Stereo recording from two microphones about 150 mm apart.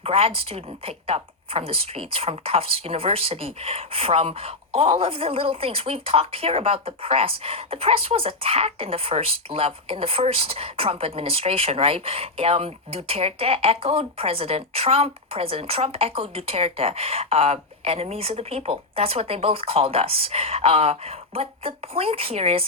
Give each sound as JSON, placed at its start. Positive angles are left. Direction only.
{"t": 0.0, "sound": "a woman's voice", "side_deg": -40}